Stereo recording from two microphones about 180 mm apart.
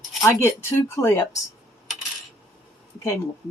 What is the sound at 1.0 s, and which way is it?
Speech, 15° left (ahead or behind).